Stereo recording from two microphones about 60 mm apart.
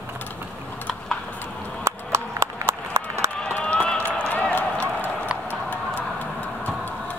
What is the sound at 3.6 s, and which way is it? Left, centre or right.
Run, left.